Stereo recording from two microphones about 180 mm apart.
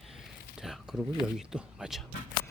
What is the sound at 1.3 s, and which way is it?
Speech, 5° right (ahead or behind).